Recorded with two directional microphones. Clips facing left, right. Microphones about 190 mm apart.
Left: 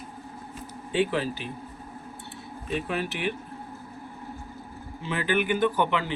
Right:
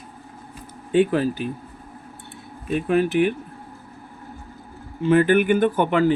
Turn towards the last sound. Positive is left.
turn(degrees=-45)  # may be behind; listen again after turning